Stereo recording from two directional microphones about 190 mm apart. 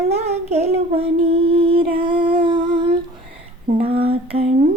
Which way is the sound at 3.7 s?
30° right (ahead or behind).